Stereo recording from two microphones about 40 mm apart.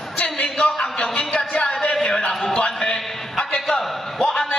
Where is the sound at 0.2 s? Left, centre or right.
Left.